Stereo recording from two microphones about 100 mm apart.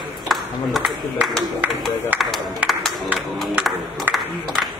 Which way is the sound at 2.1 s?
Centre (ahead or behind).